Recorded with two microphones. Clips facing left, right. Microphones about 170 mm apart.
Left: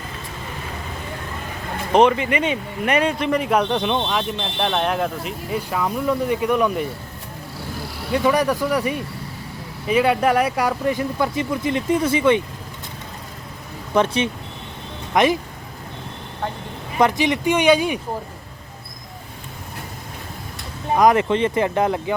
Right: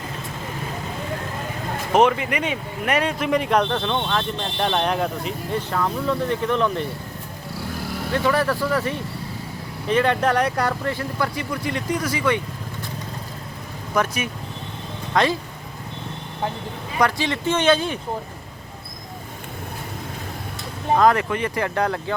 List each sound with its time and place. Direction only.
1.9 s speech: centre (ahead or behind); by 4.3 s 15° left (ahead or behind)
4.4 s speech: centre (ahead or behind)
8.1 s speech: 15° left (ahead or behind)
13.9 s speech: 25° left (ahead or behind)
17.0 s speech: 20° left (ahead or behind)
20.9 s speech: 15° left (ahead or behind)